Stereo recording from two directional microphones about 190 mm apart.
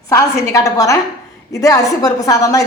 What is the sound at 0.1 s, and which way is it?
A woman's voice, 15° left (ahead or behind).